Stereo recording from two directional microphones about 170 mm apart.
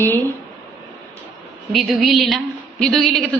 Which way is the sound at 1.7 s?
Centre (ahead or behind).